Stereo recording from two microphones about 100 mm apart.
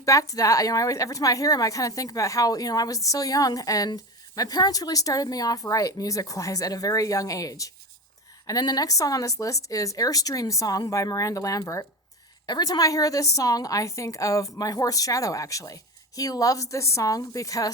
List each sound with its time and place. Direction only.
0.0 s a woman's voice: 35° left (ahead or behind)
12.5 s a woman's voice: 45° left (ahead or behind)